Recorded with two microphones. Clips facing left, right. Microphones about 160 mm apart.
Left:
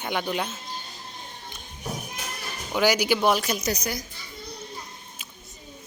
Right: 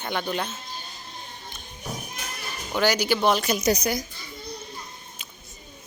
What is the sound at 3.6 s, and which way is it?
Speech, 20° right (ahead or behind).